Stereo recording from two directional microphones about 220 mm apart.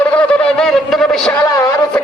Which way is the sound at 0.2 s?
5° left (ahead or behind).